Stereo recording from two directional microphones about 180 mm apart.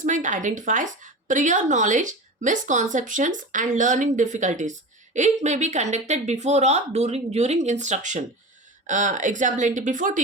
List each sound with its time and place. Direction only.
0.0 s a woman's voice: 45° right (ahead or behind)